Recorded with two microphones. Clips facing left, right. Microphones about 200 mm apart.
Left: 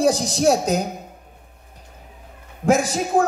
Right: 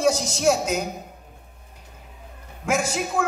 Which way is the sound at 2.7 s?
35° left (ahead or behind).